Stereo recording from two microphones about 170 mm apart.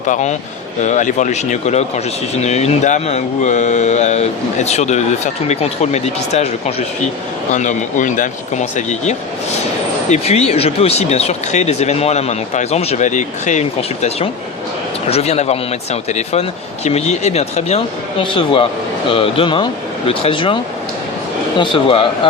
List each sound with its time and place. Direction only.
0.1 s speech: 45° left (ahead or behind)
21.6 s speech: 30° left (ahead or behind)